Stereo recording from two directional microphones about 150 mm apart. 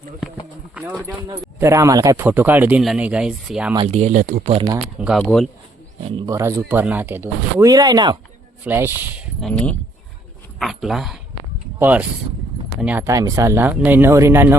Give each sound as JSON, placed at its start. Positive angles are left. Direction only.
{"t": 0.7, "sound": "speech", "side_deg": -10}
{"t": 1.5, "sound": "speech", "side_deg": -20}
{"t": 2.2, "sound": "speech", "side_deg": -10}
{"t": 3.8, "sound": "speech", "side_deg": -50}
{"t": 4.9, "sound": "speech", "side_deg": -5}
{"t": 6.2, "sound": "speech", "side_deg": -20}
{"t": 7.7, "sound": "speech", "side_deg": -25}
{"t": 8.6, "sound": "speech", "side_deg": -15}
{"t": 9.4, "sound": "speech", "side_deg": 5}
{"t": 13.1, "sound": "speech", "side_deg": -20}